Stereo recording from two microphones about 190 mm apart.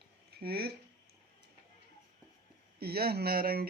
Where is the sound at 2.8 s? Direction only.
55° right (ahead or behind).